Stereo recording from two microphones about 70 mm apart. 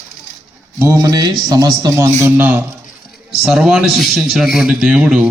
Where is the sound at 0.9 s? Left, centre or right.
Right.